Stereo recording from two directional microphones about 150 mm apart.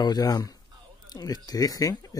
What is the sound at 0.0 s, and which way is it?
Speech, 25° left (ahead or behind).